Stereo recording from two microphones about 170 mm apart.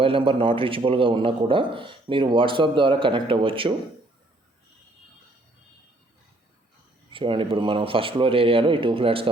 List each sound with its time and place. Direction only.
0.0 s a man's voice: 30° right (ahead or behind)
7.1 s a man's voice: 30° right (ahead or behind)